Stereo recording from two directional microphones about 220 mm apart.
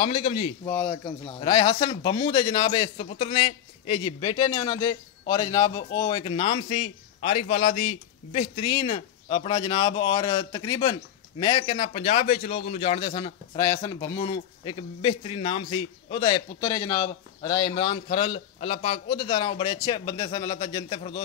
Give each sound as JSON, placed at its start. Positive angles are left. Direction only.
{"t": 0.0, "sound": "a man's voice", "side_deg": 25}
{"t": 0.7, "sound": "a man's voice", "side_deg": 10}